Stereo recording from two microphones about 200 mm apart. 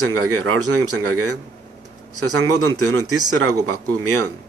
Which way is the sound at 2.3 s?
85° right.